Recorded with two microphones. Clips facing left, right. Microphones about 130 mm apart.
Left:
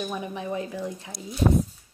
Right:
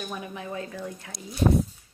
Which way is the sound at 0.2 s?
20° left (ahead or behind).